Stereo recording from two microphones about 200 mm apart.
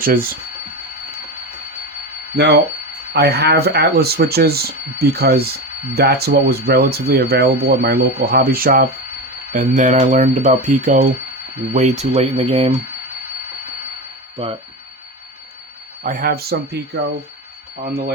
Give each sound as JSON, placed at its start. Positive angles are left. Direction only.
{"t": 0.0, "sound": "speech", "side_deg": -45}
{"t": 3.1, "sound": "speech", "side_deg": -55}
{"t": 14.3, "sound": "speech", "side_deg": -30}
{"t": 16.0, "sound": "speech", "side_deg": -45}